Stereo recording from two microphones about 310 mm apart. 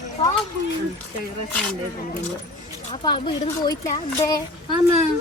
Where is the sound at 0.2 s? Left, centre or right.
Centre.